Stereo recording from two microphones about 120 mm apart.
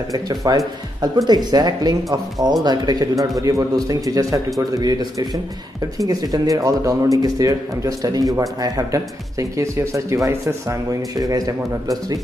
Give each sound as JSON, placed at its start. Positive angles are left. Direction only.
{"t": 0.1, "sound": "speech", "side_deg": -30}